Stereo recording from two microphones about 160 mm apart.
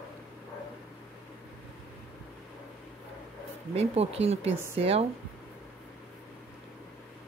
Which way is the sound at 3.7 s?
40° right (ahead or behind).